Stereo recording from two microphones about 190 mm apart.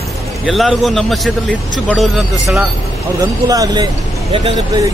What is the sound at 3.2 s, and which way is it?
Speech, 20° right (ahead or behind).